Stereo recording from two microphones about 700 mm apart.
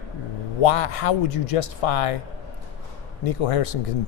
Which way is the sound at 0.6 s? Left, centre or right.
Left.